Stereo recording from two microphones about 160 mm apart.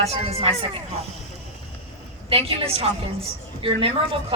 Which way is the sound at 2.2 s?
35° right (ahead or behind).